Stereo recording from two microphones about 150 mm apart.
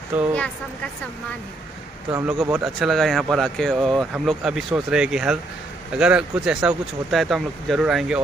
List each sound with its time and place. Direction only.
0.1 s speech: 10° right (ahead or behind)
2.1 s speech: 15° right (ahead or behind)
2.6 s speech: centre (ahead or behind)